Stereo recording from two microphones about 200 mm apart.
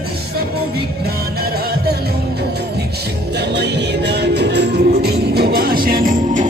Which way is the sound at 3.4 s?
55° right (ahead or behind).